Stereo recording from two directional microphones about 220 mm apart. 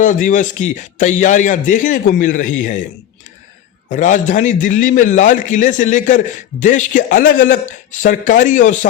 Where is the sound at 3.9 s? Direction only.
35° left (ahead or behind).